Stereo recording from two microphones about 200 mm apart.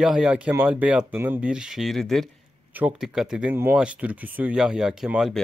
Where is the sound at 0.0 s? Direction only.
5° right (ahead or behind).